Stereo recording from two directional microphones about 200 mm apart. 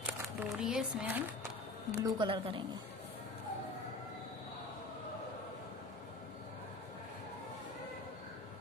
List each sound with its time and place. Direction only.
0.5 s speech: 5° right (ahead or behind)
1.9 s speech: 20° right (ahead or behind)